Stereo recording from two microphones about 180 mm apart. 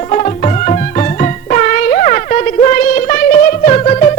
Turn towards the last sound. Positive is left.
turn(degrees=35)  # may be behind; listen again after turning